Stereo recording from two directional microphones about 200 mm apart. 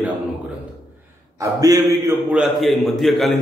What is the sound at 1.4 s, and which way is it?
Speech, 15° right (ahead or behind).